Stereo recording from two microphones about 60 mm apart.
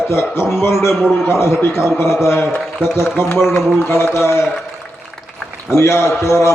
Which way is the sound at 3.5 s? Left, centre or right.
Left.